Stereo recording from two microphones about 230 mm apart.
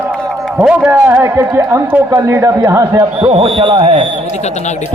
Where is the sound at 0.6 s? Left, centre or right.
Centre.